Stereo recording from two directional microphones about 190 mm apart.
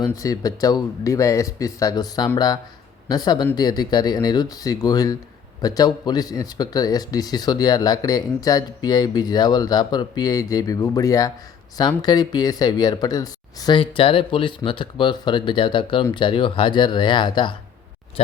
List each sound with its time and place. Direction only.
0.0 s speech: 20° left (ahead or behind)